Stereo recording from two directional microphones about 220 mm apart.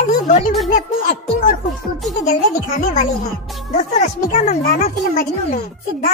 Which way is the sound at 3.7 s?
30° left (ahead or behind).